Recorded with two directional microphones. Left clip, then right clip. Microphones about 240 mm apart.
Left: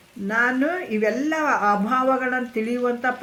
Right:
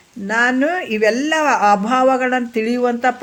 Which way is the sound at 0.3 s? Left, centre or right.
Right.